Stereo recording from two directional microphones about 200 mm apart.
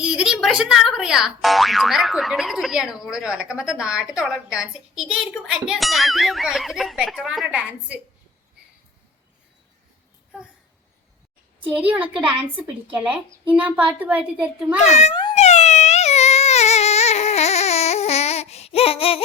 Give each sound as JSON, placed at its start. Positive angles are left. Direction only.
{"t": 0.0, "sound": "speech", "side_deg": -5}
{"t": 11.6, "sound": "a woman's voice", "side_deg": -10}
{"t": 14.8, "sound": "baby cry", "side_deg": 35}